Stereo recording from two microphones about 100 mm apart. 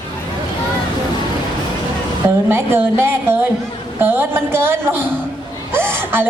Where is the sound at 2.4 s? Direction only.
20° right (ahead or behind).